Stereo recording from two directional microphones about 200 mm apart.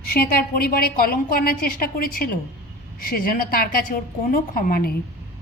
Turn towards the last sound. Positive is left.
turn(degrees=45)  # may be behind; listen again after turning